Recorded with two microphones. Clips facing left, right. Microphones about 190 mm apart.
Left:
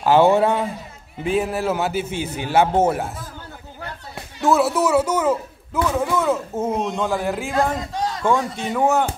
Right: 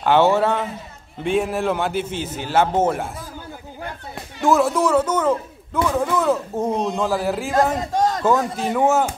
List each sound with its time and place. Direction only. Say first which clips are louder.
0.0 s a man's voice: left 1 dB; 5° left (ahead or behind)
1.1 s a man's voice: right 1 dB; centre (ahead or behind)
4.4 s a man's voice: even; centre (ahead or behind)
7.7 s a sound: right 5 dB; 45° right (ahead or behind)
8.2 s a man's voice: right 2 dB; 5° right (ahead or behind)